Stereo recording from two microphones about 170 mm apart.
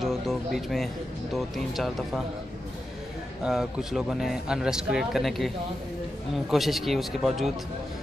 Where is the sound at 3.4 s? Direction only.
5° right (ahead or behind).